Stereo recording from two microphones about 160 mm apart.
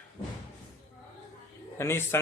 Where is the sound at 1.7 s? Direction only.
15° left (ahead or behind).